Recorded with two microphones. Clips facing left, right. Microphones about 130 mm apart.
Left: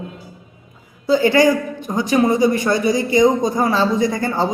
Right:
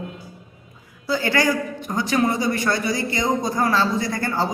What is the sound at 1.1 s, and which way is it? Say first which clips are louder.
A woman's voice: left 7 dB; 20° left (ahead or behind).